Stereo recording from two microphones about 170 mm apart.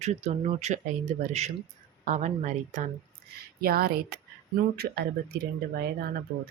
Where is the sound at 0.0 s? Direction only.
40° right (ahead or behind).